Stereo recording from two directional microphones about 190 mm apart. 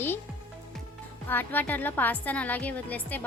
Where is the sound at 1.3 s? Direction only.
10° left (ahead or behind).